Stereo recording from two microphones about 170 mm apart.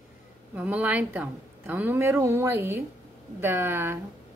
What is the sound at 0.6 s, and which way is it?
A woman's voice, 10° right (ahead or behind).